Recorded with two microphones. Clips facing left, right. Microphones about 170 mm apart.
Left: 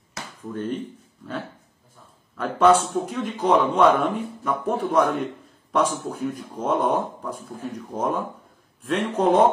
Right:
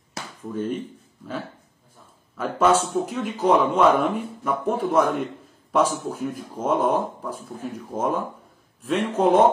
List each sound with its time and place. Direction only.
0.5 s a man's voice: 5° right (ahead or behind)
2.3 s a man's voice: 5° right (ahead or behind)